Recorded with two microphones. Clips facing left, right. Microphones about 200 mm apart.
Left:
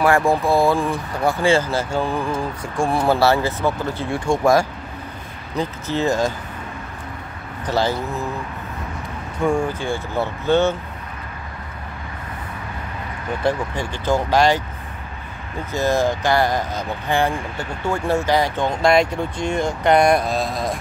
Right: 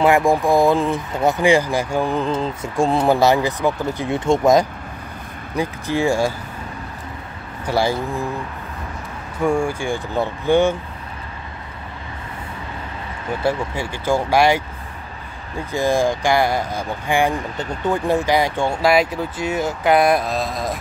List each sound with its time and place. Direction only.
0.0 s speech: 15° right (ahead or behind)
7.6 s speech: 10° right (ahead or behind)
9.4 s speech: 10° right (ahead or behind)
13.4 s speech: 10° right (ahead or behind)
15.7 s speech: 15° right (ahead or behind)